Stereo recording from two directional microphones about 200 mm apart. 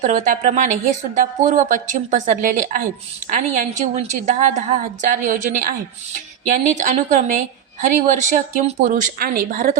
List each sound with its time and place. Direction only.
0.0 s a woman's voice: 35° right (ahead or behind)